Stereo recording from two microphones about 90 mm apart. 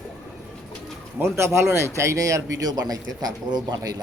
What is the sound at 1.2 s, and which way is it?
Speech, 25° right (ahead or behind).